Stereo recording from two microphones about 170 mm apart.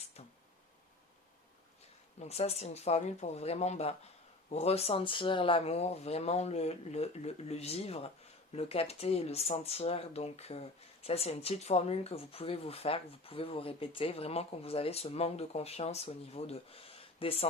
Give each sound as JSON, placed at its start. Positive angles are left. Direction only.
{"t": 2.1, "sound": "speech", "side_deg": 40}